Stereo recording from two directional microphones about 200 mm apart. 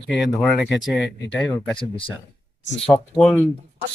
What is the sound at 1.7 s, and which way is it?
Speech, 25° left (ahead or behind).